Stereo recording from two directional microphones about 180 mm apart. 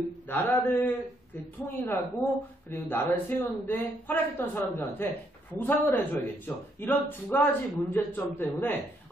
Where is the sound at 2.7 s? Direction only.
15° left (ahead or behind).